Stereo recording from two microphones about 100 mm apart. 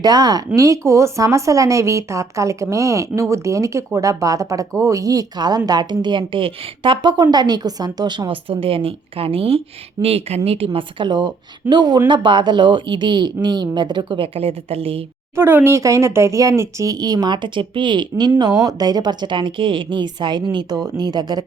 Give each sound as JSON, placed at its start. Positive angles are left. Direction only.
{"t": 0.0, "sound": "a woman's voice", "side_deg": -40}
{"t": 10.0, "sound": "speech", "side_deg": -90}
{"t": 15.4, "sound": "a woman's voice", "side_deg": -25}